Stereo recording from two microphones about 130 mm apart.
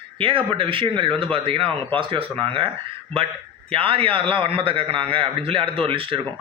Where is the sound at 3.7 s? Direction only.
45° right (ahead or behind).